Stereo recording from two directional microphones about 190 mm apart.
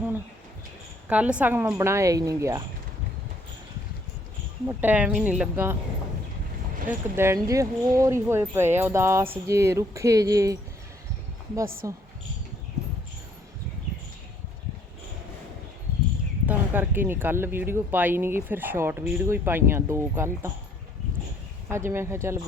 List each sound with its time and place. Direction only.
1.1 s speech: 5° right (ahead or behind)
4.6 s speech: 10° right (ahead or behind)
6.8 s speech: 15° right (ahead or behind)
11.8 s speech: 15° right (ahead or behind)
16.5 s speech: 10° right (ahead or behind)
21.7 s speech: 15° right (ahead or behind)